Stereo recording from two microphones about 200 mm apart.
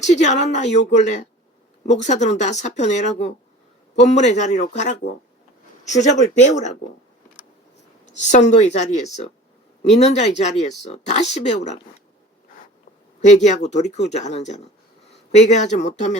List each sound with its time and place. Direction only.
0.0 s speech: 35° left (ahead or behind)
8.2 s speech: 35° left (ahead or behind)
13.2 s speech: 35° left (ahead or behind)